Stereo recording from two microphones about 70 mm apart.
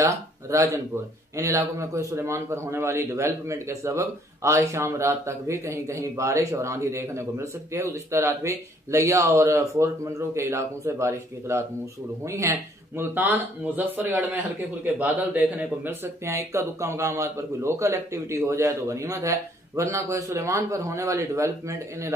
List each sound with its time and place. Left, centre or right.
0.0 s a man's voice: right